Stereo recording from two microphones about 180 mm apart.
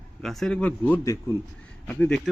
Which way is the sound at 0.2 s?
Centre (ahead or behind).